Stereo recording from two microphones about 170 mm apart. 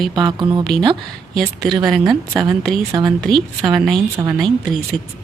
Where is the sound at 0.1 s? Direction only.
25° right (ahead or behind).